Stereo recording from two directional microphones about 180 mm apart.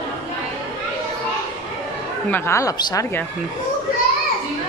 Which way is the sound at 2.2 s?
15° left (ahead or behind).